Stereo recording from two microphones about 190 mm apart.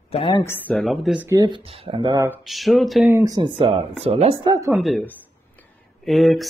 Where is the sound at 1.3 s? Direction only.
20° right (ahead or behind).